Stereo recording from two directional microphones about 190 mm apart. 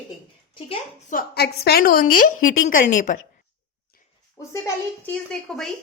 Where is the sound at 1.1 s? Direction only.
55° left (ahead or behind).